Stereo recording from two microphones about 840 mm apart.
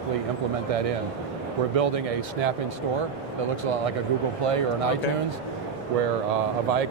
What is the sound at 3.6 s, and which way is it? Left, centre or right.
Speech, right.